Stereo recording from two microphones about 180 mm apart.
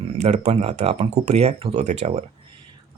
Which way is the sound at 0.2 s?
35° right (ahead or behind).